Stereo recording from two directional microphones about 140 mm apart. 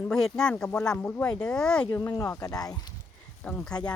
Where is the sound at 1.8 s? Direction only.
25° left (ahead or behind).